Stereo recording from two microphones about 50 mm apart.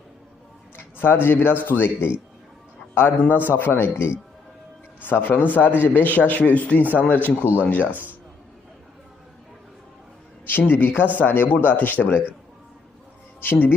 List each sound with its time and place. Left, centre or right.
0.8 s a man's voice: left
5.0 s a man's voice: left
7.9 s a man's voice: right
10.4 s a man's voice: left
13.4 s a man's voice: left